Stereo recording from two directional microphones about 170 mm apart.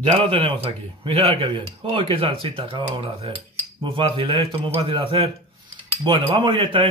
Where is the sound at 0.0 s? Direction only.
35° right (ahead or behind).